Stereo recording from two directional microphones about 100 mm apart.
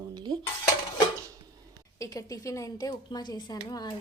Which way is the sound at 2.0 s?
35° left (ahead or behind).